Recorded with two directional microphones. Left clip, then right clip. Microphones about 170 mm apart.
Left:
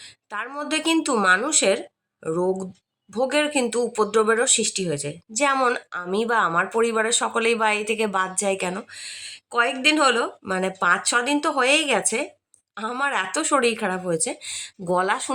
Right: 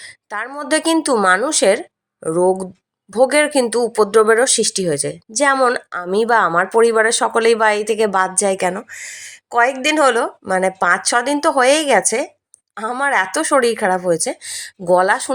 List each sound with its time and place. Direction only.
0.0 s speech: 30° right (ahead or behind)